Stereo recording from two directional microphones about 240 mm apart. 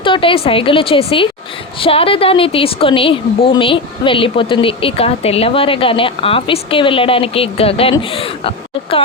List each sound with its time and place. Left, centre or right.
0.0 s a woman's voice: left